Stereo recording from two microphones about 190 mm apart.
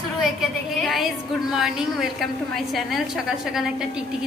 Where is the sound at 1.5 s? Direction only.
Centre (ahead or behind).